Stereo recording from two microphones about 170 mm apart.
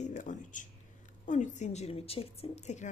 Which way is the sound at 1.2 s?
45° left (ahead or behind).